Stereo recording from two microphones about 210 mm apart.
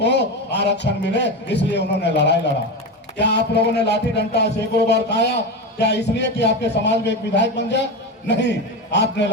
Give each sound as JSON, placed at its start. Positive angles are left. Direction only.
{"t": 0.0, "sound": "a man's voice", "side_deg": 55}
{"t": 3.2, "sound": "a sound", "side_deg": 55}
{"t": 8.3, "sound": "a man's voice", "side_deg": 55}